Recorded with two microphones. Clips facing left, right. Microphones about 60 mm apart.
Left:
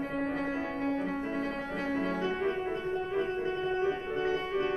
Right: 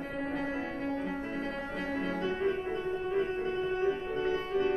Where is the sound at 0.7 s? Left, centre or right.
Left.